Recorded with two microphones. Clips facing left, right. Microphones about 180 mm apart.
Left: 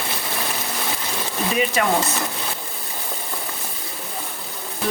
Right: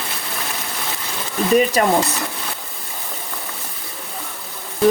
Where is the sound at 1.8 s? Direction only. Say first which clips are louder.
Right 4 dB; 40° right (ahead or behind).